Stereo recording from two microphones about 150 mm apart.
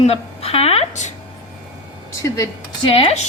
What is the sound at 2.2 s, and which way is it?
Speech, 20° left (ahead or behind).